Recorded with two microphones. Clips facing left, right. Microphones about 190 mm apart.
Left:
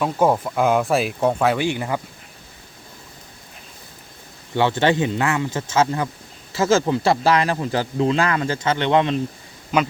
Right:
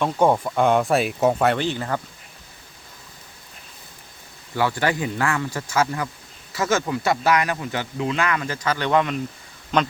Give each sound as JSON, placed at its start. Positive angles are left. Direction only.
{"t": 0.0, "sound": "speech", "side_deg": 5}
{"t": 1.5, "sound": "speech", "side_deg": 15}
{"t": 4.5, "sound": "speech", "side_deg": 25}
{"t": 9.7, "sound": "speech", "side_deg": 5}